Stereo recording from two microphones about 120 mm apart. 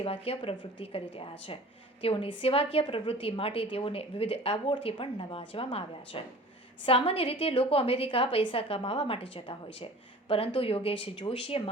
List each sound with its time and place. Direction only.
0.0 s a woman's voice: 50° left (ahead or behind)